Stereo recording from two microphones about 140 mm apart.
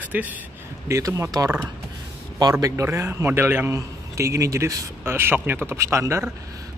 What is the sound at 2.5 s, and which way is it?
A man's voice, 20° right (ahead or behind).